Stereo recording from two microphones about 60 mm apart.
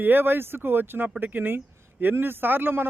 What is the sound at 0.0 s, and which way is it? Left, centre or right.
Speech, right.